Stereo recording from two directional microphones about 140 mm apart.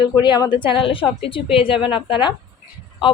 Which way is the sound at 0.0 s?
30° left (ahead or behind).